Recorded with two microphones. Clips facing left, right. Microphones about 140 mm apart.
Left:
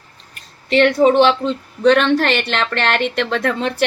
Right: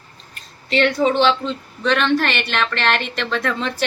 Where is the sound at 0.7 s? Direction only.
55° left (ahead or behind).